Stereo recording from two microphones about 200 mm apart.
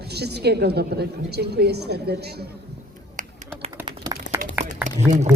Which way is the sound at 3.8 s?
20° right (ahead or behind).